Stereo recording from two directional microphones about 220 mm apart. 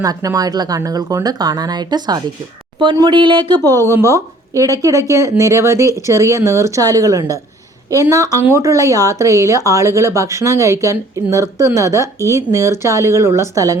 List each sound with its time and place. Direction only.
0.0 s speech: 15° right (ahead or behind)